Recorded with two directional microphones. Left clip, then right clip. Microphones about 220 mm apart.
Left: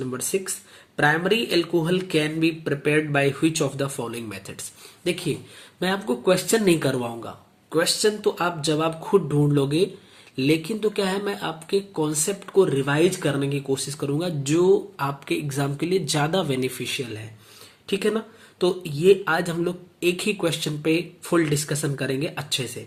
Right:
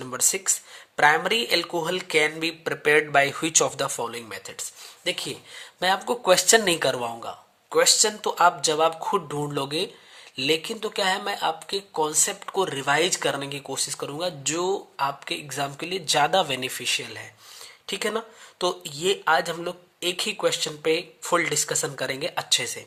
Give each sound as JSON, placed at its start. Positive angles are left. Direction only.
{"t": 0.0, "sound": "speech", "side_deg": -30}